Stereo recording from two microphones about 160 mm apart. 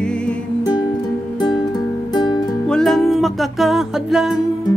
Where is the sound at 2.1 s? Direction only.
25° left (ahead or behind).